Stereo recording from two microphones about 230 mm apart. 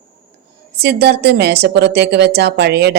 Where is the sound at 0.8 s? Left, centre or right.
Right.